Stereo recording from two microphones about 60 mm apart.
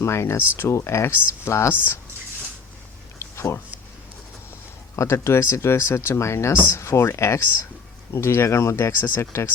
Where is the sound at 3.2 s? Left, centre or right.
Left.